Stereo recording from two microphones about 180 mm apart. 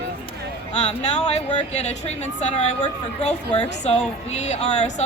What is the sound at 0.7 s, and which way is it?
Speech, 40° left (ahead or behind).